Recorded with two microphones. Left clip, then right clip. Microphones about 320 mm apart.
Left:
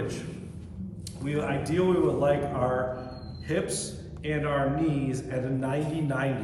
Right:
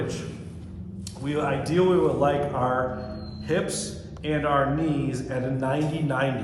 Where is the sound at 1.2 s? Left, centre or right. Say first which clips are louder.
Right 4 dB; centre.